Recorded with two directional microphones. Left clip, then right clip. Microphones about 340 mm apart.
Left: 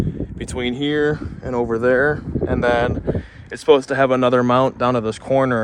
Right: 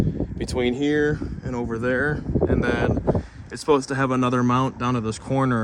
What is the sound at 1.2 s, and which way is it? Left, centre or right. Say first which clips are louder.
Speech: left 7 dB; centre.